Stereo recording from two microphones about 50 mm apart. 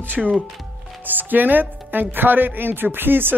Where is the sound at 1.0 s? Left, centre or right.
Right.